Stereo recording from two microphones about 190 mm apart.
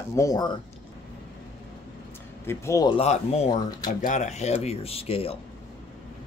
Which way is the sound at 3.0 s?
35° left (ahead or behind).